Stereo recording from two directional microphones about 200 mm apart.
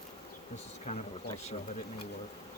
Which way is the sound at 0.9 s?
40° left (ahead or behind).